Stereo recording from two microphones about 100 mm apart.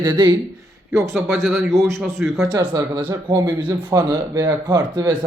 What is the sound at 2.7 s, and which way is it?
Speech, 50° right (ahead or behind).